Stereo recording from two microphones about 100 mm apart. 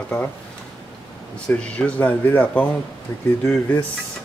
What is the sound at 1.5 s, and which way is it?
Speech, 15° left (ahead or behind).